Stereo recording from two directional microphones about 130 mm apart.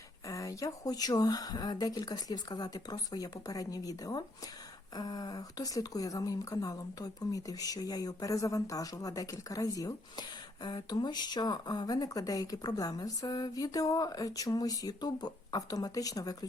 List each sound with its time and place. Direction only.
0.3 s speech: 25° left (ahead or behind)